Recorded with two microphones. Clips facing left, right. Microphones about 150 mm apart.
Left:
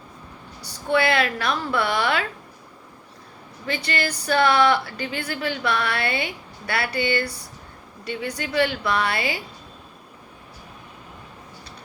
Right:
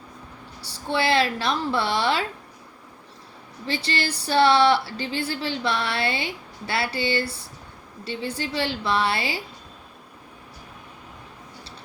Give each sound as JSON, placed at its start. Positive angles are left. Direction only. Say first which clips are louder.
{"t": 0.6, "sound": "a woman's voice", "louder": "left 3 dB", "side_deg": -30}
{"t": 3.7, "sound": "a woman's voice", "louder": "left 1 dB", "side_deg": -30}